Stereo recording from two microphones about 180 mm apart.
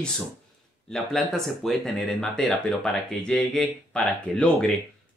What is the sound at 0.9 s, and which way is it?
Speech, centre (ahead or behind).